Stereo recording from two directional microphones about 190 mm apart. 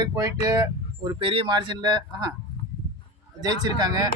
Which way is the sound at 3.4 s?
20° right (ahead or behind).